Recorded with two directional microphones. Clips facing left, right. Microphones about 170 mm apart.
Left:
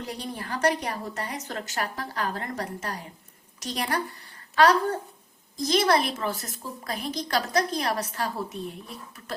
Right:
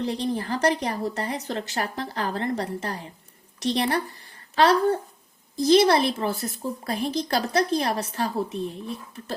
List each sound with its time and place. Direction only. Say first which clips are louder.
0.0 s a woman's voice: right 8 dB; 30° right (ahead or behind)